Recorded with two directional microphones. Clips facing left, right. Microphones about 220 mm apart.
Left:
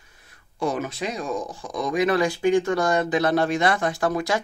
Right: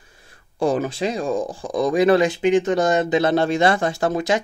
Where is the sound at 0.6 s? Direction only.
30° right (ahead or behind).